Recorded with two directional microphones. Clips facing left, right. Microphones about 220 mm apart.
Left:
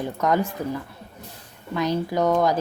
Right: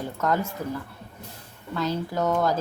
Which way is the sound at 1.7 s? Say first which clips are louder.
Left 4 dB; 15° left (ahead or behind).